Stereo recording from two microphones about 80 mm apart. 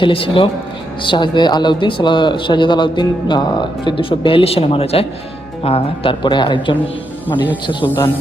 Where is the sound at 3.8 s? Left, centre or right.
Left.